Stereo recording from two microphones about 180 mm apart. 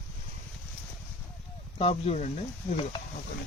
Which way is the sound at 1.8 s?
35° left (ahead or behind).